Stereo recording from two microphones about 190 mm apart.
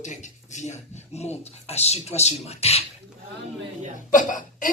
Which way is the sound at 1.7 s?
35° left (ahead or behind).